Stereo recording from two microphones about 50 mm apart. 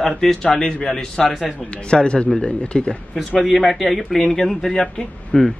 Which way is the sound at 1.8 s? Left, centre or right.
Centre.